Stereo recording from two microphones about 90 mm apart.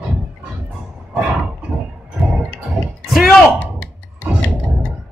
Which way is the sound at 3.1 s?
Centre (ahead or behind).